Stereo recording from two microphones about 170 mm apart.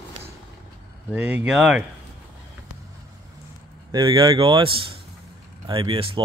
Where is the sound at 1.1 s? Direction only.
5° right (ahead or behind).